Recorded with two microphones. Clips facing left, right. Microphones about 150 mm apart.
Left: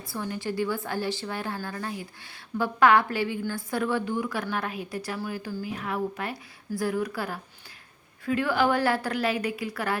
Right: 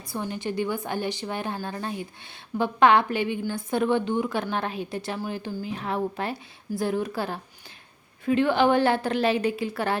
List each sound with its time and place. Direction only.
0.1 s a woman's voice: 20° right (ahead or behind)